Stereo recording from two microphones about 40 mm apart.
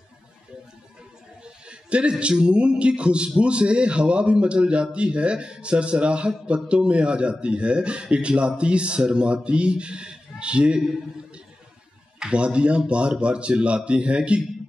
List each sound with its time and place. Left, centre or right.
1.4 s a man's voice: right
12.3 s a man's voice: right